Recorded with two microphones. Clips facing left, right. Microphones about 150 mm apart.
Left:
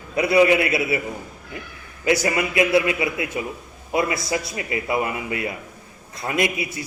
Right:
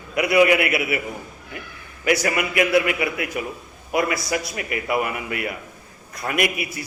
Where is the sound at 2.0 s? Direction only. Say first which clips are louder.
Left 1 dB; 25° left (ahead or behind).